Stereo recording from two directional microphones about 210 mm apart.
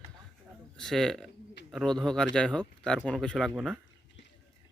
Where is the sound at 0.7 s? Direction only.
Centre (ahead or behind).